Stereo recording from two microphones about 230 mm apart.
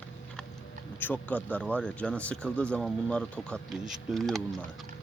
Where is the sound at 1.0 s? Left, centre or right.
Centre.